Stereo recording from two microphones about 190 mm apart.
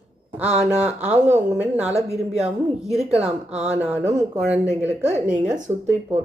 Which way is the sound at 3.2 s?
5° right (ahead or behind).